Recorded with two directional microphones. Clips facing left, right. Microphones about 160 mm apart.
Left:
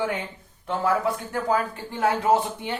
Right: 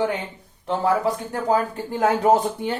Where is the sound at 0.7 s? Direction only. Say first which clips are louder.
Right 3 dB; 30° right (ahead or behind).